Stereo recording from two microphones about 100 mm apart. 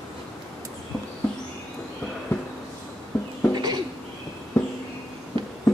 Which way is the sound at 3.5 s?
40° right (ahead or behind).